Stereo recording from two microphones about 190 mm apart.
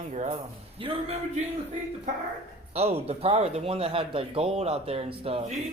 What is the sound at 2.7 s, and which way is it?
Speech, 35° right (ahead or behind).